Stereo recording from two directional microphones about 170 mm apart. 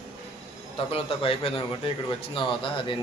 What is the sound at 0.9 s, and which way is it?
A man's voice, 35° left (ahead or behind).